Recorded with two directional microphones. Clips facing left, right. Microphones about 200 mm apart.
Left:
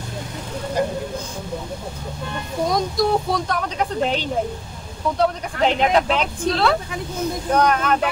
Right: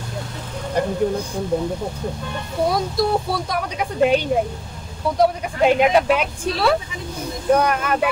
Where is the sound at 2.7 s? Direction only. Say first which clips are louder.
Left 3 dB; 5° right (ahead or behind).